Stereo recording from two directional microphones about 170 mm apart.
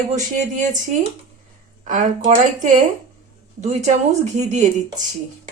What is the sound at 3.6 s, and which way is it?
A woman's voice, 45° right (ahead or behind).